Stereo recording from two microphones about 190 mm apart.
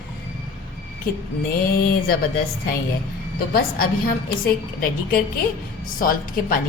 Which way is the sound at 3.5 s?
50° left (ahead or behind).